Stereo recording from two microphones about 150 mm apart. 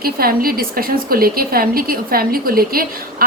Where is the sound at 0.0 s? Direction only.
80° right.